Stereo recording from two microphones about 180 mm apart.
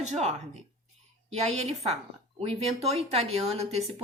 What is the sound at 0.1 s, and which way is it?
Speech, 40° right (ahead or behind).